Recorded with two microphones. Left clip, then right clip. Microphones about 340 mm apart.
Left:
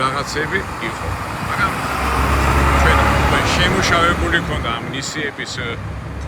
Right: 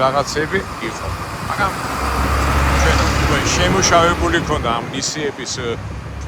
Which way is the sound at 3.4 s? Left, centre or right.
Centre.